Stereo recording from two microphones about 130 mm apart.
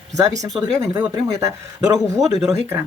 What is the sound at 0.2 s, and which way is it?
Speech, 25° right (ahead or behind).